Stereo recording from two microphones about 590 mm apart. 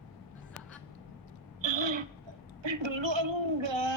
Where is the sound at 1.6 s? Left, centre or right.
Right.